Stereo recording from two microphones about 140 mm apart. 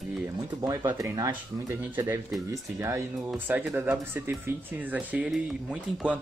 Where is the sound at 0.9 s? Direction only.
25° right (ahead or behind).